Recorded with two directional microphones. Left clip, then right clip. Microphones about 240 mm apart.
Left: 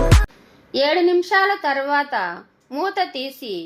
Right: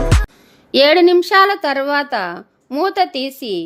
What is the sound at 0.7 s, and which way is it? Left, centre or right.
A woman's voice, right.